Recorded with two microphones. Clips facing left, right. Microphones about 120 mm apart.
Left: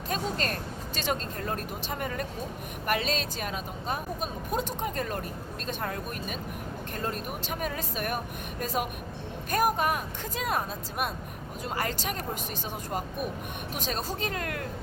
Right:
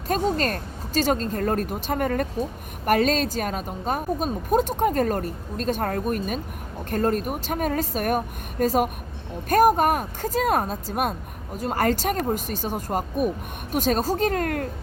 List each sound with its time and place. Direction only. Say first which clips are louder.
0.1 s a woman's voice: right 8 dB; 40° right (ahead or behind)